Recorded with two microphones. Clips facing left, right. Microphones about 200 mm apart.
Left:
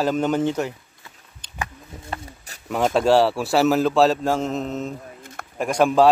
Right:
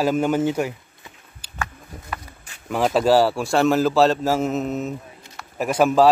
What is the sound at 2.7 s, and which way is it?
Speech, centre (ahead or behind).